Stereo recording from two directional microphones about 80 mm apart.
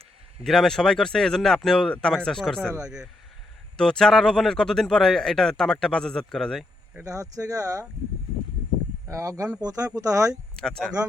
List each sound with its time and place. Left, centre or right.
0.4 s speech: centre
2.7 s speech: centre
3.8 s speech: centre
7.6 s speech: right
9.0 s speech: right
10.6 s speech: centre